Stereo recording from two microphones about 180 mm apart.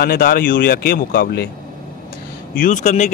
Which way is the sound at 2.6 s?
45° left (ahead or behind).